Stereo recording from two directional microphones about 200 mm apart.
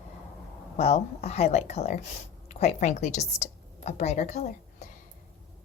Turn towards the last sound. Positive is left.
turn(degrees=35)  # may be behind; listen again after turning